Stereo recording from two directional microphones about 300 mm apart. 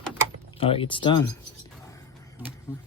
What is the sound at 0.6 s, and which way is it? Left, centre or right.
Speech, centre.